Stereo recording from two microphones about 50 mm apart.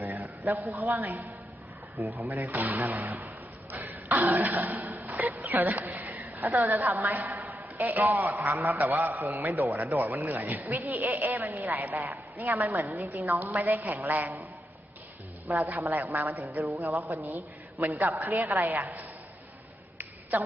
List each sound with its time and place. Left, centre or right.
0.0 s a sound: right
0.6 s a man's voice: right
15.8 s a man's voice: right